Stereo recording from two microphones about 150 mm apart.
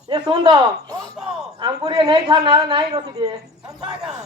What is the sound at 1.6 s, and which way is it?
A woman's voice, 30° right (ahead or behind).